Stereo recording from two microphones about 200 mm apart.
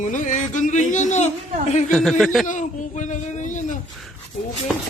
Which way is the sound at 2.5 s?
35° left (ahead or behind).